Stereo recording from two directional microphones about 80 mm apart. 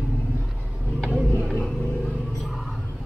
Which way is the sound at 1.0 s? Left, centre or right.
Centre.